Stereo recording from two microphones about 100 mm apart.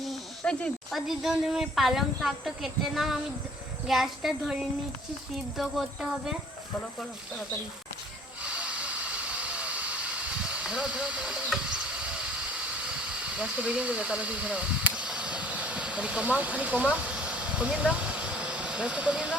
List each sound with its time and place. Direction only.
0.0 s snake: 5° left (ahead or behind)
0.9 s speech: centre (ahead or behind)
5.5 s speech: 5° right (ahead or behind)
8.4 s hiss: 10° right (ahead or behind)